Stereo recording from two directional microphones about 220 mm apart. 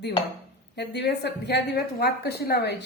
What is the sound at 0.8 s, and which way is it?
A woman's voice, 50° left (ahead or behind).